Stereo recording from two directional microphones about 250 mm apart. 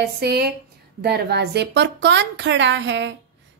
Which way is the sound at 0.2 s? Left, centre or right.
Right.